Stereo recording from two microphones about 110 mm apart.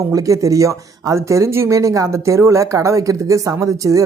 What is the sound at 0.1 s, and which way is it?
Speech, 30° right (ahead or behind).